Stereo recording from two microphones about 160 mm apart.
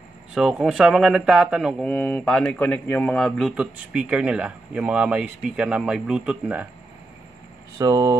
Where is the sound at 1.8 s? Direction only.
10° left (ahead or behind); by 6.7 s 5° right (ahead or behind).